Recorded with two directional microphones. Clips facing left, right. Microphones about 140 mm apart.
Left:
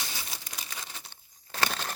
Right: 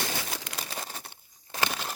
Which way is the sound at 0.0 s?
70° right (ahead or behind).